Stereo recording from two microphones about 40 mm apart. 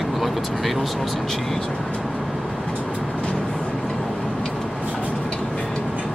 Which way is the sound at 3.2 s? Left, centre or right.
Left.